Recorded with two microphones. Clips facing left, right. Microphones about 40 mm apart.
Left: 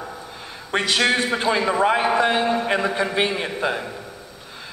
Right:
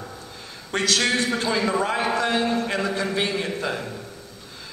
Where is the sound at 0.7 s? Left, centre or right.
Left.